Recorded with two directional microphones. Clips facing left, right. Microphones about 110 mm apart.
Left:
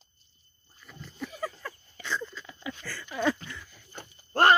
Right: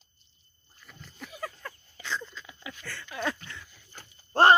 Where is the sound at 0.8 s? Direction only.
Centre (ahead or behind).